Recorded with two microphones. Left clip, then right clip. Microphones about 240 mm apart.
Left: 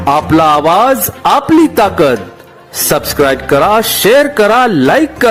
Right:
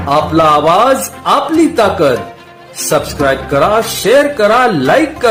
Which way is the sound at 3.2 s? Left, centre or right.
Left.